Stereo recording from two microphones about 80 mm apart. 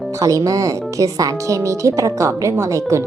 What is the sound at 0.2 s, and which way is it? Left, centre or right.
Speech, right.